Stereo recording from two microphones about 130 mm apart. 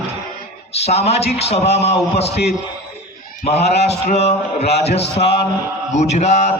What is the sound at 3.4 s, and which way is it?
Speech, 55° left (ahead or behind).